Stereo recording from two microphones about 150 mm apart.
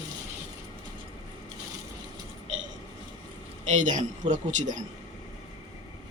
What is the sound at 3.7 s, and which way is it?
A man's voice, 55° right (ahead or behind).